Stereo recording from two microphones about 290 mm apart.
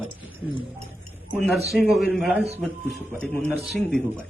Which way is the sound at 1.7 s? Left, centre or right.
Centre.